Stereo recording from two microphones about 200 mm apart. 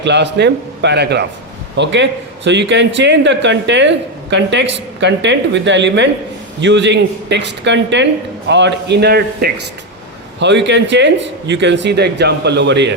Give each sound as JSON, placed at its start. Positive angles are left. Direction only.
{"t": 0.0, "sound": "a man's voice", "side_deg": -60}